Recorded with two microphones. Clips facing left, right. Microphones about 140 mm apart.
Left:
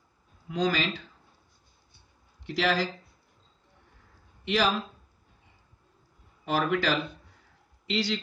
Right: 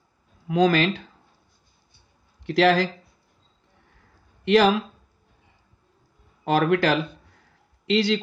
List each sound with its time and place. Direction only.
0.5 s speech: 60° right (ahead or behind)
2.4 s speech: 65° right (ahead or behind)
4.5 s speech: 65° right (ahead or behind)
6.4 s speech: 65° right (ahead or behind)
7.8 s speech: 70° right (ahead or behind)